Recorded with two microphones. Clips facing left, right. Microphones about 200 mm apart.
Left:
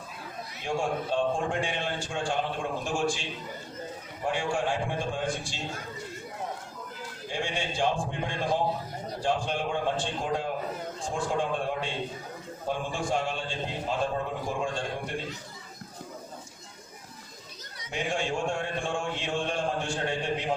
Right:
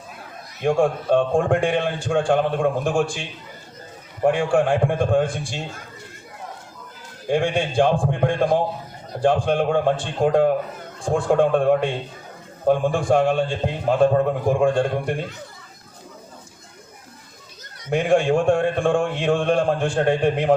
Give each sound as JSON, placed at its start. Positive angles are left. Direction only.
{"t": 0.6, "sound": "a man's voice", "side_deg": -55}
{"t": 7.3, "sound": "a man's voice", "side_deg": -55}
{"t": 17.7, "sound": "a man's voice", "side_deg": -55}